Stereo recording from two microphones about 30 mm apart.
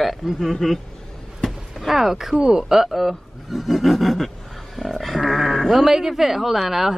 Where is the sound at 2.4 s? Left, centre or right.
Right.